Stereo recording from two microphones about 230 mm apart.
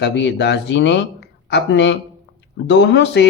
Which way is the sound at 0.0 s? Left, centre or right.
Left.